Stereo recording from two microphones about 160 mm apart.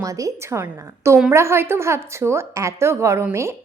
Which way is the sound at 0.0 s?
20° right (ahead or behind).